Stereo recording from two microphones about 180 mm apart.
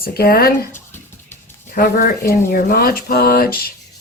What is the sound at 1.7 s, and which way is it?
A woman's voice, 55° left (ahead or behind).